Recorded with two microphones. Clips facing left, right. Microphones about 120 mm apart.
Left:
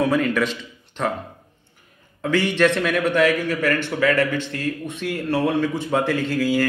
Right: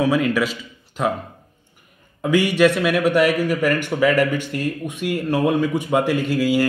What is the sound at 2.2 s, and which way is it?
A man's voice, 10° right (ahead or behind).